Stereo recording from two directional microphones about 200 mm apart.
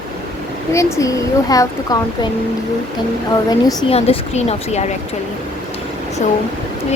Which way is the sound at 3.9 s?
30° left (ahead or behind).